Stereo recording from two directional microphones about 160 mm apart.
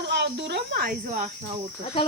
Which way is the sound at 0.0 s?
90° right.